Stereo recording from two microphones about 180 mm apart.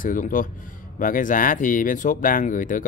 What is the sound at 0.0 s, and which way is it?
Speech, 50° left (ahead or behind).